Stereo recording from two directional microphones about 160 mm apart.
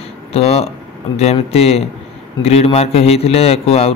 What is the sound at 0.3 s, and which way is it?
A man's voice, 40° left (ahead or behind).